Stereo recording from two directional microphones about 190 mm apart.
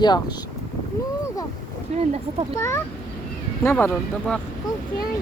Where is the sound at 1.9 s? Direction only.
35° right (ahead or behind).